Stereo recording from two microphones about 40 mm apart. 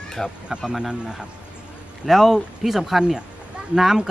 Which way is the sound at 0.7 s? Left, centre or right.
Centre.